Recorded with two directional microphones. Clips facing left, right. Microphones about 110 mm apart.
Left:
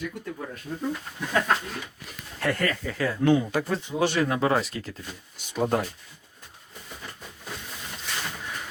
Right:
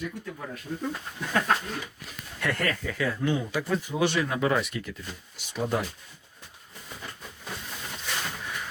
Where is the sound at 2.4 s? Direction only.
35° left (ahead or behind).